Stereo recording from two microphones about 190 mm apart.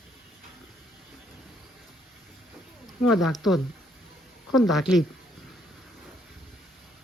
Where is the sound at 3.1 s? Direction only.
Centre (ahead or behind).